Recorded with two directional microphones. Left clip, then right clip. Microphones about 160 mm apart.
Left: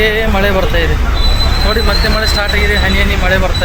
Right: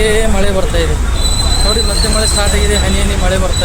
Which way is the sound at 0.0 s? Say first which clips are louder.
Left 1 dB; 15° right (ahead or behind).